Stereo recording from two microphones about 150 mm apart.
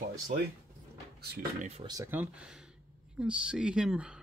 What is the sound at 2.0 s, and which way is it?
Speech, 10° right (ahead or behind).